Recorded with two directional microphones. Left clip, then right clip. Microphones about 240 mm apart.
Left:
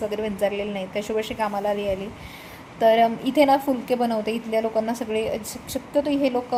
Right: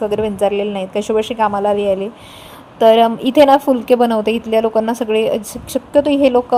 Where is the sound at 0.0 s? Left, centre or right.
Right.